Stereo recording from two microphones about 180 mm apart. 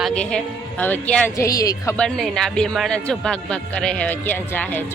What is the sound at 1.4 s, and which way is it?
Speech, 20° left (ahead or behind).